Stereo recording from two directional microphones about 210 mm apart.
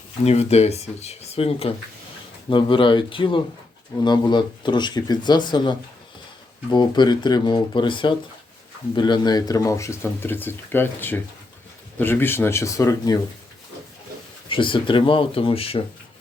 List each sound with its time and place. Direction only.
0.3 s speech: 30° left (ahead or behind); by 13.1 s 15° left (ahead or behind)
14.5 s speech: 25° left (ahead or behind)